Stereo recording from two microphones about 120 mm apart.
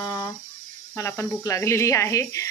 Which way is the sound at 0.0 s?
35° left (ahead or behind).